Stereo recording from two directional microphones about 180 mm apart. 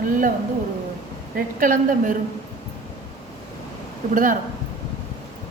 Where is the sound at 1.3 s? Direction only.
50° right (ahead or behind).